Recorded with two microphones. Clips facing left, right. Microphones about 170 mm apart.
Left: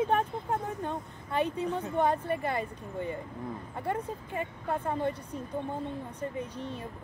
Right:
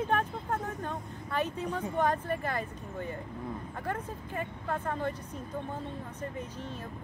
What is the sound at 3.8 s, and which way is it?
Speech, 10° left (ahead or behind).